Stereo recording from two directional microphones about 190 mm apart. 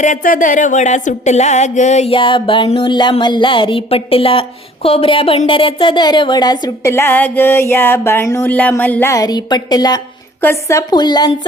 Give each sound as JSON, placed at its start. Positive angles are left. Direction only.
{"t": 0.0, "sound": "music", "side_deg": 45}